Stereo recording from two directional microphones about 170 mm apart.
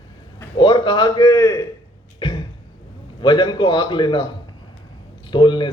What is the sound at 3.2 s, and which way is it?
A man's voice, 25° left (ahead or behind).